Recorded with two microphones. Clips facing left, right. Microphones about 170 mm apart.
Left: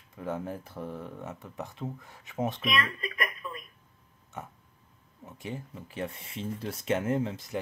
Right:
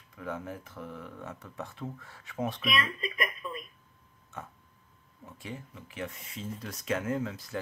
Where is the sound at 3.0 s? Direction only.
25° right (ahead or behind).